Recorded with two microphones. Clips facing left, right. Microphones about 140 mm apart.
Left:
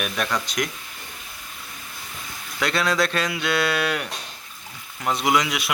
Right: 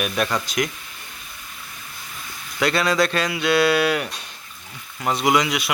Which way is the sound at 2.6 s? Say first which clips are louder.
Right 3 dB; centre (ahead or behind).